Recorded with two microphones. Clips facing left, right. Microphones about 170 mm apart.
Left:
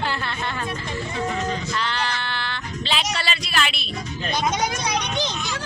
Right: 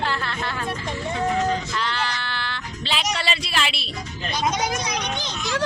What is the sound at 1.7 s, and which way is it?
Sheep, 5° right (ahead or behind).